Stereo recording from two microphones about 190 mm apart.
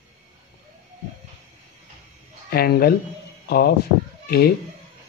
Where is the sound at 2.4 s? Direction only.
55° left (ahead or behind).